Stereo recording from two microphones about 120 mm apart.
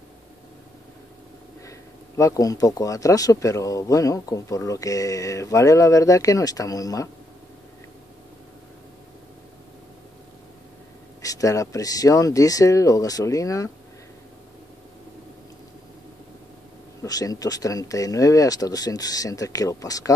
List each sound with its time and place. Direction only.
1.7 s speech: 25° left (ahead or behind)
11.2 s speech: 30° left (ahead or behind)
17.0 s speech: 30° left (ahead or behind)